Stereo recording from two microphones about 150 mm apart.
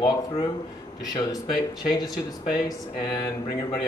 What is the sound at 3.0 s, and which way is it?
Speech, 25° left (ahead or behind).